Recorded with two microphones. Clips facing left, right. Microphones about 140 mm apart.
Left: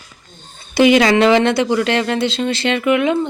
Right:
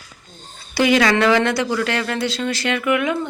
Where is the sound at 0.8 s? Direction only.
20° left (ahead or behind).